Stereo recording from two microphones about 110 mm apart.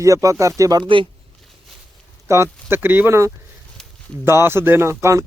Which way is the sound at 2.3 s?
25° right (ahead or behind).